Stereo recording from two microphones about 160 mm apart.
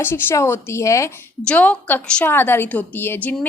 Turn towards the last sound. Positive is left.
turn(degrees=10)  # may be behind; listen again after turning